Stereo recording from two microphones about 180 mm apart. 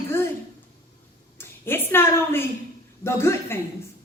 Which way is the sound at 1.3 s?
10° left (ahead or behind).